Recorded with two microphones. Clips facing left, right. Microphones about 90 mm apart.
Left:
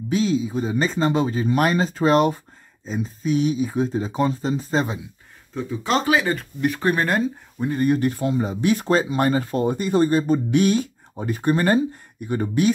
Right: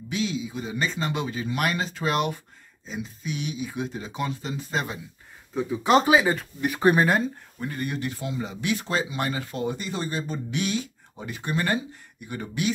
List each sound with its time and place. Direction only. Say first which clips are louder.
0.1 s speech: left 8 dB; 40° left (ahead or behind)
5.5 s speech: right 2 dB; 15° right (ahead or behind)
6.2 s speech: left 3 dB; 5° right (ahead or behind)
6.8 s speech: right 4 dB; 15° right (ahead or behind)
7.6 s speech: left 9 dB; 30° left (ahead or behind)
7.9 s speech: left 10 dB; 45° left (ahead or behind)